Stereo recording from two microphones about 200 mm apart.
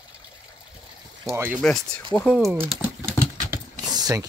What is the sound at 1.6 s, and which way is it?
Speech, 5° left (ahead or behind).